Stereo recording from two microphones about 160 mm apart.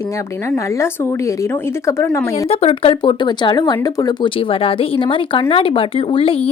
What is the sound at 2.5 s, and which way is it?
Speech, 40° left (ahead or behind).